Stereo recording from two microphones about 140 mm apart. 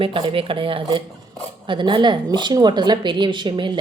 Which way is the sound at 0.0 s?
40° right (ahead or behind).